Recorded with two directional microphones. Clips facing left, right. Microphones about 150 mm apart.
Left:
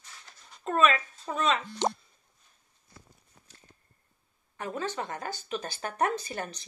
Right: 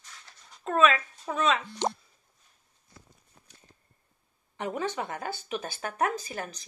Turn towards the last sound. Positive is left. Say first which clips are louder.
# left 1 dB
turn(degrees=0)  # may be behind; listen again after turning